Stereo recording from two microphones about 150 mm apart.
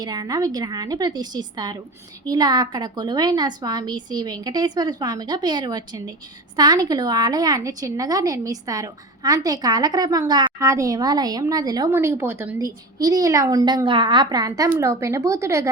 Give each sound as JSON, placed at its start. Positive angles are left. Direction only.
{"t": 0.0, "sound": "a woman's voice", "side_deg": -25}